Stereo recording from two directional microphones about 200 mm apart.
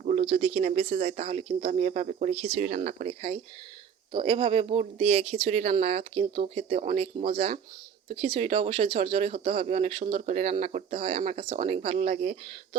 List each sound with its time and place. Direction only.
0.0 s speech: 35° right (ahead or behind)